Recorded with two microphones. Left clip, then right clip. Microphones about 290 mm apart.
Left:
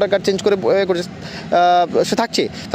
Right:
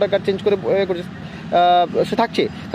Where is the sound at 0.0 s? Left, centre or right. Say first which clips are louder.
Left 2 dB; left.